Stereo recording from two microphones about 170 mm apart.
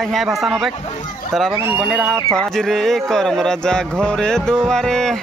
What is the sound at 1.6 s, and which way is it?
Speech, 15° right (ahead or behind).